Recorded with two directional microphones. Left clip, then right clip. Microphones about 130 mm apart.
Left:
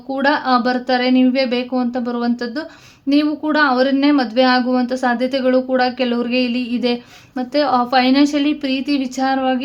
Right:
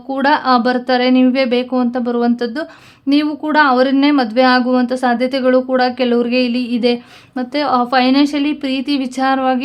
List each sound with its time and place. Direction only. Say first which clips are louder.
0.1 s speech: right 3 dB; 35° right (ahead or behind)